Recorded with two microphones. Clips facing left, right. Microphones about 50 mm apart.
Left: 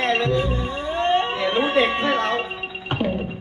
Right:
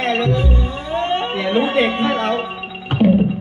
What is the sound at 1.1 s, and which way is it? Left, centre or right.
Speech, right.